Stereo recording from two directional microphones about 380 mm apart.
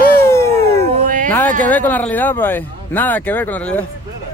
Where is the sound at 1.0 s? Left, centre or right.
Right.